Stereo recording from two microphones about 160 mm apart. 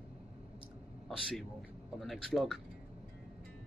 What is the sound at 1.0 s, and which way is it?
A man's voice, centre (ahead or behind).